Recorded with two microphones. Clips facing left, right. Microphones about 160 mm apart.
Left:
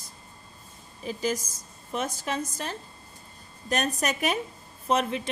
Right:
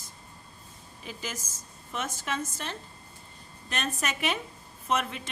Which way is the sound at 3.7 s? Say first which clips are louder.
Left 5 dB; 40° left (ahead or behind).